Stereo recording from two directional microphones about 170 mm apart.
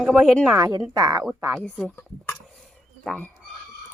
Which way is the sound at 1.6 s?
5° left (ahead or behind).